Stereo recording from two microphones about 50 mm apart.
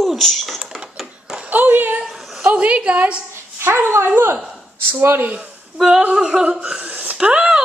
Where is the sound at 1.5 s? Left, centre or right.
Right.